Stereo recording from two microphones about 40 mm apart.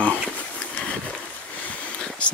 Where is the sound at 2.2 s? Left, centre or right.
Left.